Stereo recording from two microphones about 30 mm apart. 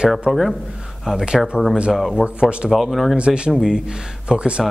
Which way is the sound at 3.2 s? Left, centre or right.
Right.